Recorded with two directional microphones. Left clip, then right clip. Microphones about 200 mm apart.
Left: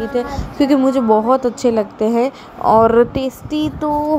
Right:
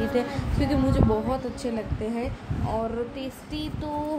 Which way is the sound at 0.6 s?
35° left (ahead or behind).